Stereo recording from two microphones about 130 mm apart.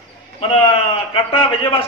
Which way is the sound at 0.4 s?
45° left (ahead or behind).